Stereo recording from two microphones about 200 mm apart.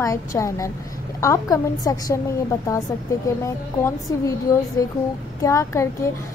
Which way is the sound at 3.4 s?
15° left (ahead or behind).